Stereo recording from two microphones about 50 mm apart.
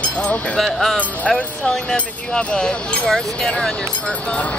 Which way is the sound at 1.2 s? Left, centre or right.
Left.